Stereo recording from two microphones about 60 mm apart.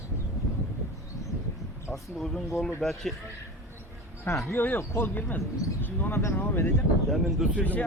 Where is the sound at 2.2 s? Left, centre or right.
Centre.